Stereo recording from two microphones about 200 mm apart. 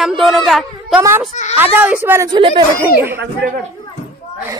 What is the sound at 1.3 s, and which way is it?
Speech, 35° left (ahead or behind).